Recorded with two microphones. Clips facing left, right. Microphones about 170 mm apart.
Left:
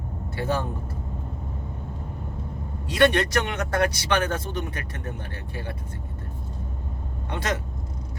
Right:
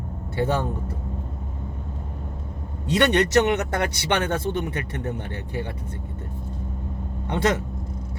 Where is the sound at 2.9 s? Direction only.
25° right (ahead or behind).